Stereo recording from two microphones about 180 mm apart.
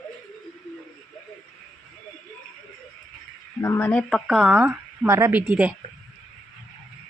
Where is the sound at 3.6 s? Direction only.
15° left (ahead or behind).